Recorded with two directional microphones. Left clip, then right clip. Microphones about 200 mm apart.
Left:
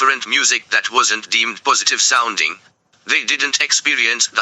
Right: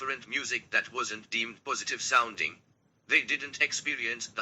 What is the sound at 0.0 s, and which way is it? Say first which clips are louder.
A man's voice: left 19 dB; 50° left (ahead or behind).